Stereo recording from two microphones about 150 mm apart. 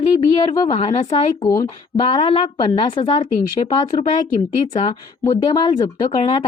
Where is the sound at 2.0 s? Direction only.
35° left (ahead or behind).